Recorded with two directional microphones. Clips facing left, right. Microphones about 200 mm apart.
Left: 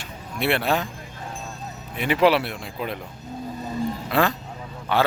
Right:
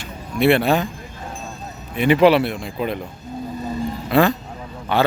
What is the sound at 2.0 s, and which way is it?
Speech, centre (ahead or behind).